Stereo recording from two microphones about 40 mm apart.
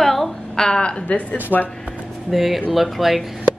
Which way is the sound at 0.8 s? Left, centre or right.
Left.